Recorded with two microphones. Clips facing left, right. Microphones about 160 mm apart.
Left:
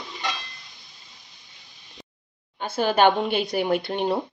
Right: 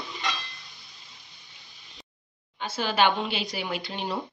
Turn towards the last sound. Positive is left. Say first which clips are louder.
# left 9 dB
turn(degrees=55)  # may be behind; listen again after turning